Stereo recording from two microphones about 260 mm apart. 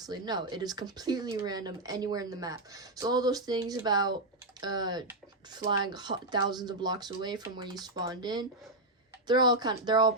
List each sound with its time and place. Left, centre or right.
0.0 s speech: centre